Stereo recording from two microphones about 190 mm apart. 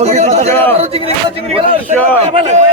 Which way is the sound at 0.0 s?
35° right (ahead or behind).